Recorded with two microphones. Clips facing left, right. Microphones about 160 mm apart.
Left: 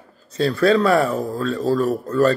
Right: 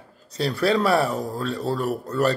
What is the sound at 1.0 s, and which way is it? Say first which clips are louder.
A man's voice: left 4 dB; 10° right (ahead or behind).